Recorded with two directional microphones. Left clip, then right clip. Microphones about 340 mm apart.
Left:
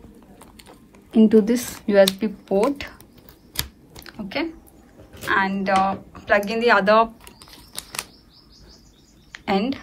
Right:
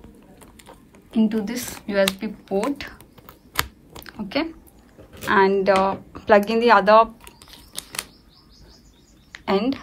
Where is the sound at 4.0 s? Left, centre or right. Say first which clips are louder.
Right 2 dB; centre.